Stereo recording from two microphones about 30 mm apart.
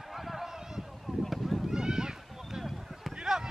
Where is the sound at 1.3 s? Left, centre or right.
Centre.